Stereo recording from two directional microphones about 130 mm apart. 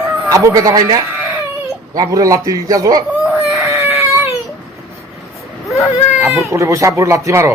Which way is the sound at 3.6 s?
20° right (ahead or behind).